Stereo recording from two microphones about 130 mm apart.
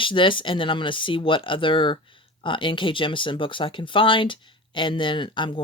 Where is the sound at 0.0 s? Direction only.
40° left (ahead or behind).